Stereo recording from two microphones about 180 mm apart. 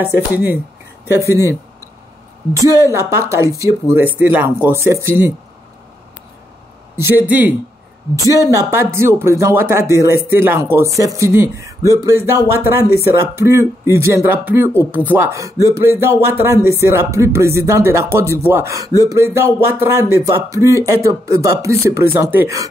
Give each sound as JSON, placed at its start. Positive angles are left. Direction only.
{"t": 0.0, "sound": "speech", "side_deg": -10}
{"t": 7.2, "sound": "speech", "side_deg": -10}